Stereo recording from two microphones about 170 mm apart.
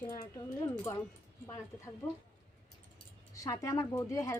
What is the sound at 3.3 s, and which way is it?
Speech, 20° left (ahead or behind).